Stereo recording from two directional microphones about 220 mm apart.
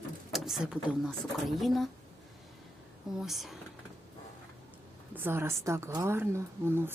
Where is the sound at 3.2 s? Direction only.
Centre (ahead or behind).